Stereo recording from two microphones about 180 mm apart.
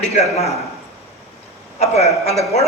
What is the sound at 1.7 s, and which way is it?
Speech, 35° left (ahead or behind).